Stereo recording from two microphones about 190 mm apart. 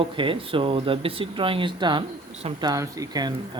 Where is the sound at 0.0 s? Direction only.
30° right (ahead or behind).